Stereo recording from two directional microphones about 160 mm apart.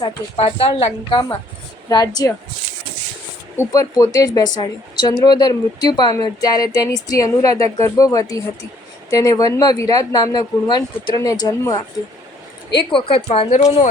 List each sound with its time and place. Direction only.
0.3 s speech: 35° left (ahead or behind)
1.9 s speech: 25° left (ahead or behind)
3.6 s speech: 20° left (ahead or behind); by 13.6 s 35° left (ahead or behind)